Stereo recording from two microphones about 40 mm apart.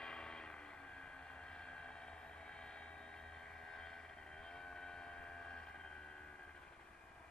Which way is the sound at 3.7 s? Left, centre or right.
Centre.